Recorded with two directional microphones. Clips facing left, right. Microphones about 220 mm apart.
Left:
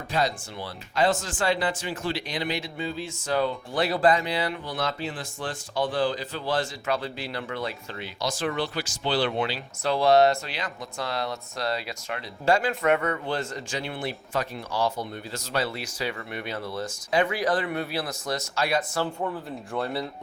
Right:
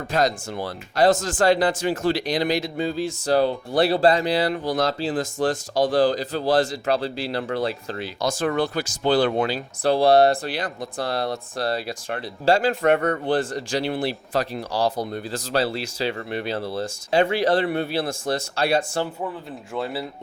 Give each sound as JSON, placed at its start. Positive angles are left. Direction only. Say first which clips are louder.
{"t": 0.1, "sound": "speech", "louder": "right 4 dB", "side_deg": -45}
{"t": 8.2, "sound": "speech", "louder": "right 5 dB", "side_deg": -50}
{"t": 9.8, "sound": "speech", "louder": "right 3 dB", "side_deg": -35}
{"t": 19.2, "sound": "speech", "louder": "even", "side_deg": 0}